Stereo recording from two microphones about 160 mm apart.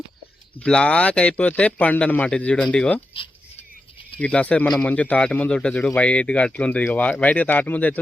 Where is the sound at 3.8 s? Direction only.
35° left (ahead or behind).